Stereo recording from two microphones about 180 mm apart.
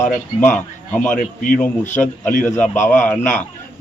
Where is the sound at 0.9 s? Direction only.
10° left (ahead or behind).